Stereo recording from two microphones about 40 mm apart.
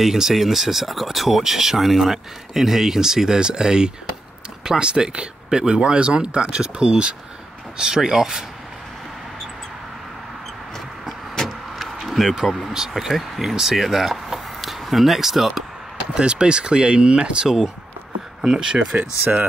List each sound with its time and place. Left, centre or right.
0.0 s speech: centre
11.3 s vehicle: centre
12.7 s speech: centre
16.2 s speech: right
18.9 s speech: right